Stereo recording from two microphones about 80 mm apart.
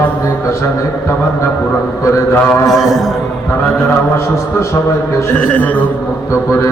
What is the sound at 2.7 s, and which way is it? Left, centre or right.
Speech, centre.